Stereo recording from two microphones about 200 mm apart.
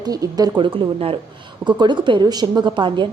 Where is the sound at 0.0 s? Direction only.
20° right (ahead or behind).